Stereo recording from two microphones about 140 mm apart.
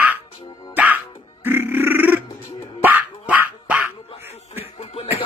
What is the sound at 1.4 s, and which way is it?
Grunt, 15° right (ahead or behind).